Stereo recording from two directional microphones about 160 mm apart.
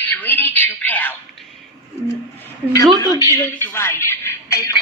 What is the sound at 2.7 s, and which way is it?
A woman's voice, 20° left (ahead or behind).